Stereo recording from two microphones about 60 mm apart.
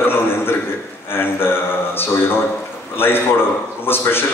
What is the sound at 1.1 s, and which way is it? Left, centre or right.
Speech, left.